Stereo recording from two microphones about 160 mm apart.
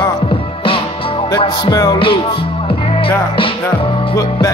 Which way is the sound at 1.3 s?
25° left (ahead or behind).